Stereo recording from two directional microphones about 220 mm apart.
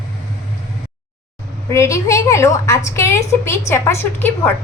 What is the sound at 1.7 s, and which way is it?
A woman's voice, 15° left (ahead or behind).